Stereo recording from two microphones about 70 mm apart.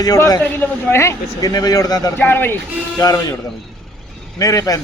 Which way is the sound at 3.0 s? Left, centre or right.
Left.